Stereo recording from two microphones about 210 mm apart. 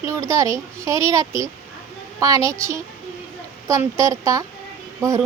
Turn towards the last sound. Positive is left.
turn(degrees=-15)  # may be behind; listen again after turning